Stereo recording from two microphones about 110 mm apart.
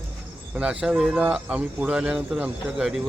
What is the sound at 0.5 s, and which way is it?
Speech, 10° right (ahead or behind).